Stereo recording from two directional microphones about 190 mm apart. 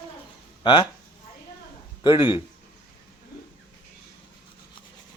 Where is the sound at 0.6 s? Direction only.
25° left (ahead or behind).